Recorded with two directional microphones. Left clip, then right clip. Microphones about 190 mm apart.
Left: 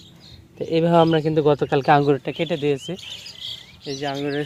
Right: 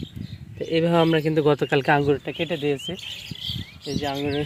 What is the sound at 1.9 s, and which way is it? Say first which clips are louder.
Speech: left 3 dB; 25° left (ahead or behind).